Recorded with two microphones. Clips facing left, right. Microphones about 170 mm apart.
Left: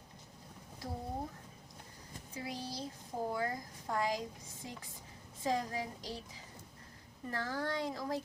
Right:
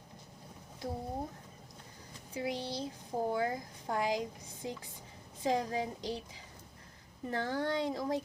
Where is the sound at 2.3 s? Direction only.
20° right (ahead or behind).